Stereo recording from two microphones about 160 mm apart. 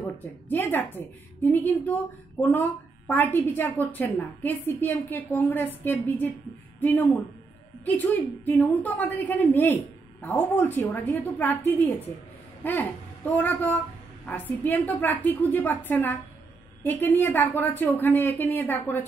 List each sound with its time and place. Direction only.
0.5 s a woman's voice: 15° left (ahead or behind)